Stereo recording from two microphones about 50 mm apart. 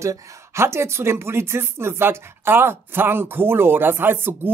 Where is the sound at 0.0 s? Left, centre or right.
Right.